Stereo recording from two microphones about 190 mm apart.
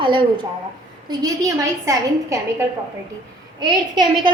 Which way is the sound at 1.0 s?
20° right (ahead or behind).